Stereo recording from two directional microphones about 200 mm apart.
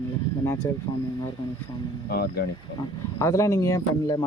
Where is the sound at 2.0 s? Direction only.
50° left (ahead or behind).